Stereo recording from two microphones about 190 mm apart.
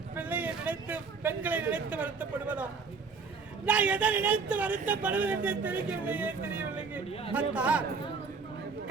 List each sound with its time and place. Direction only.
0.2 s speech: 10° right (ahead or behind)
3.7 s speech: 5° right (ahead or behind)
7.1 s speech: 30° left (ahead or behind)
7.3 s speech: 5° right (ahead or behind)